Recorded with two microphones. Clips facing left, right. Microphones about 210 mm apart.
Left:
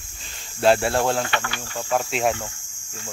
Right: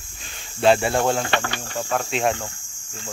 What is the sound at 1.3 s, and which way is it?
Cricket, 35° right (ahead or behind).